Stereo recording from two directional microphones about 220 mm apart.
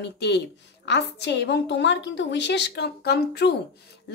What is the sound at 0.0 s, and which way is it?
Speech, 50° left (ahead or behind).